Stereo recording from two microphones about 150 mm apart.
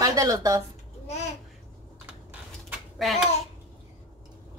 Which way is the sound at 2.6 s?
5° right (ahead or behind).